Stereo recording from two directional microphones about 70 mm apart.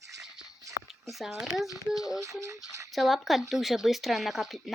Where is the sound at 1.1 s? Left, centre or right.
Centre.